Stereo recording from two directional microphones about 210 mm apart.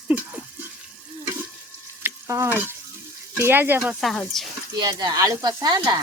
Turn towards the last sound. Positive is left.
turn(degrees=-15)  # may be behind; listen again after turning